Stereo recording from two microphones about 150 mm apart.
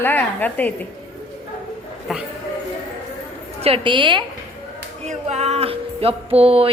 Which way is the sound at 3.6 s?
35° right (ahead or behind).